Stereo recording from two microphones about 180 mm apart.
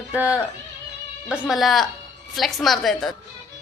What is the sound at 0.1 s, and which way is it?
A woman's voice, 10° right (ahead or behind).